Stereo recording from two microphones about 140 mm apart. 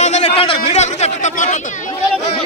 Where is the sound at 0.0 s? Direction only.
55° left (ahead or behind).